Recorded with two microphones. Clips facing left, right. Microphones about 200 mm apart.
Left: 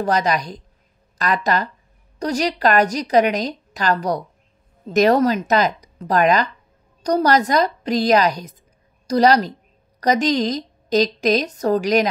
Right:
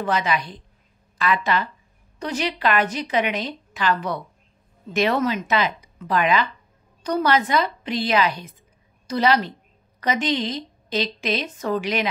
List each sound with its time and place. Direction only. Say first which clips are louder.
0.0 s a woman's voice: left 4 dB; 40° left (ahead or behind)